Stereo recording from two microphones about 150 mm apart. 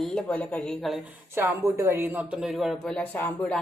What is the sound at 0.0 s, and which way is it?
Speech, 5° left (ahead or behind).